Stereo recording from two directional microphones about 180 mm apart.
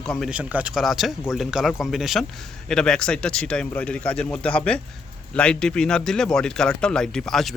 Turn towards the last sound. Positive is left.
turn(degrees=0)  # may be behind; listen again after turning